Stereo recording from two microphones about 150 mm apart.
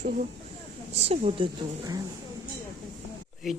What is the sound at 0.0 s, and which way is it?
Speech, 65° right (ahead or behind).